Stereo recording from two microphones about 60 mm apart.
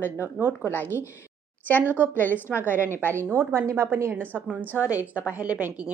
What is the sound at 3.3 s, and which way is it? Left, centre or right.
Speech, right.